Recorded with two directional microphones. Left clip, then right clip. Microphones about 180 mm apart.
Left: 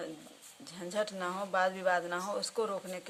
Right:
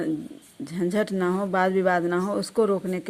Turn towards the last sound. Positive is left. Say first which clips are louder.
# right 12 dB
turn(degrees=-30)  # may be behind; listen again after turning